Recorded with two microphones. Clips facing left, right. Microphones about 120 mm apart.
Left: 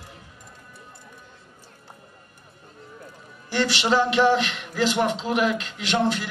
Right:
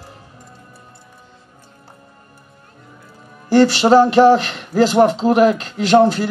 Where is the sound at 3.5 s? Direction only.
40° right (ahead or behind).